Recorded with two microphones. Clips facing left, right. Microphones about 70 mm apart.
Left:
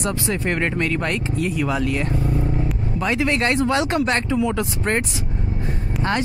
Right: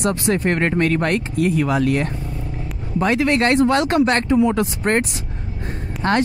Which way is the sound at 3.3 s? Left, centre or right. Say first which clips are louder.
Right 4 dB; right.